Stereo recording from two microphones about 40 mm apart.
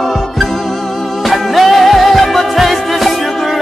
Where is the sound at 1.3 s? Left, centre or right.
Centre.